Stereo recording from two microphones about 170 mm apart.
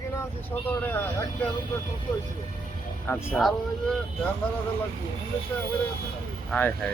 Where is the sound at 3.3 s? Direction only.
Centre (ahead or behind).